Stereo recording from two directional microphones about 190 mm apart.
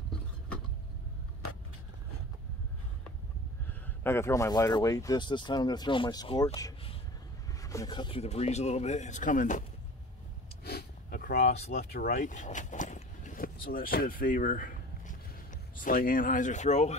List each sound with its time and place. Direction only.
3.6 s speech: 10° left (ahead or behind); by 9.7 s 45° left (ahead or behind)
10.6 s a sound: 55° left (ahead or behind)
11.4 s speech: 35° left (ahead or behind)
11.7 s speech: 55° left (ahead or behind); by 16.9 s 35° left (ahead or behind)